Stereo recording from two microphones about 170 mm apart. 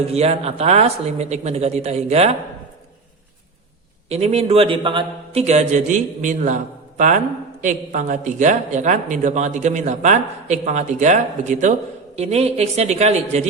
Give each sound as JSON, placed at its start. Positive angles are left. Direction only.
{"t": 0.1, "sound": "a man's voice", "side_deg": -35}
{"t": 4.1, "sound": "a man's voice", "side_deg": -40}